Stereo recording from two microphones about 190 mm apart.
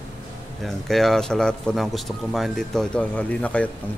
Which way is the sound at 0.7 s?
Centre (ahead or behind).